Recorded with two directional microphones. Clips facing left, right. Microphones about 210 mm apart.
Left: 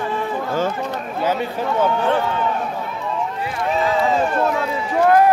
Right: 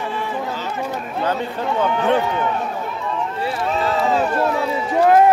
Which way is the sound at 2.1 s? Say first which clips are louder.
Right 2 dB; 15° right (ahead or behind).